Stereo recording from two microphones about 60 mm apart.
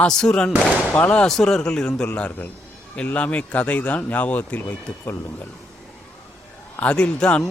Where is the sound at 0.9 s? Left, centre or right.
Left.